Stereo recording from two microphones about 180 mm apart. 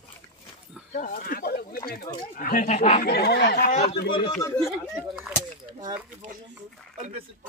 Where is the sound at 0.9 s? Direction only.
50° left (ahead or behind).